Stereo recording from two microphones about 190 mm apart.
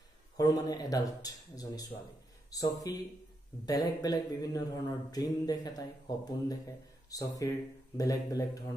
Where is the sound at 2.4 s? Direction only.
20° left (ahead or behind).